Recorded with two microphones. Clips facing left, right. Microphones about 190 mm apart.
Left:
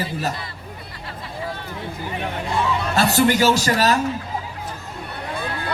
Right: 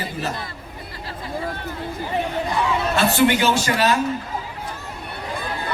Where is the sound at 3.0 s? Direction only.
40° left (ahead or behind).